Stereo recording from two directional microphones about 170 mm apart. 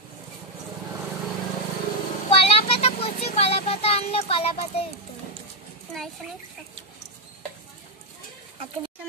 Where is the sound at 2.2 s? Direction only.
35° left (ahead or behind).